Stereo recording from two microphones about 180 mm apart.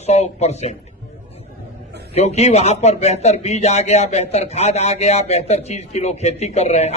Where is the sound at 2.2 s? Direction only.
35° left (ahead or behind).